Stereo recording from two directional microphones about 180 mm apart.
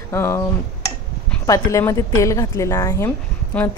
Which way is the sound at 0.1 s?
15° left (ahead or behind).